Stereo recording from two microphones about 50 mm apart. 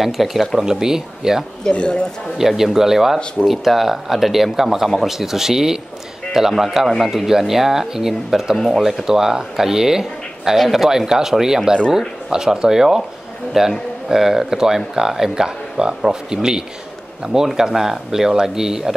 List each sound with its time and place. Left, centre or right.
0.0 s speech: centre
1.6 s speech: centre
2.3 s speech: centre